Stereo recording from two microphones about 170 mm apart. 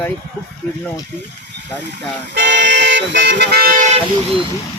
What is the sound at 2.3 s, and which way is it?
Vehicle, 90° right.